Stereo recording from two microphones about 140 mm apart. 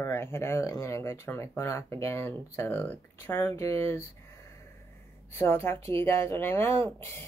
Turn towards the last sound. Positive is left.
turn(degrees=15)  # may be behind; listen again after turning